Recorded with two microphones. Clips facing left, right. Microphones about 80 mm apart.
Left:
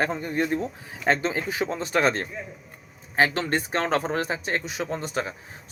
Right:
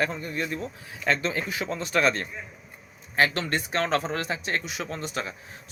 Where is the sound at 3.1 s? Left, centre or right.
Left.